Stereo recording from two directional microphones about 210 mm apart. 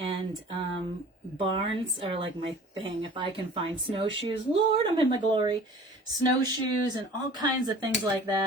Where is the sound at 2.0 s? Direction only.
25° right (ahead or behind).